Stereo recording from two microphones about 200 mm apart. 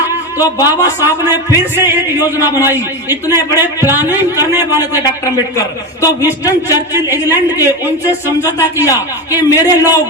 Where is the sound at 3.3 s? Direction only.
15° left (ahead or behind).